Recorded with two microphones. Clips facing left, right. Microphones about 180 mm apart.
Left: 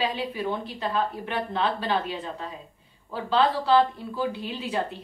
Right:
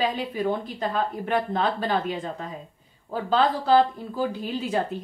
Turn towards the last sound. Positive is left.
turn(degrees=-45)  # may be behind; listen again after turning